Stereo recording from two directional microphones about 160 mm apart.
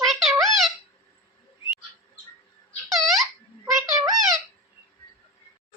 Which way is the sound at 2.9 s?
Centre (ahead or behind).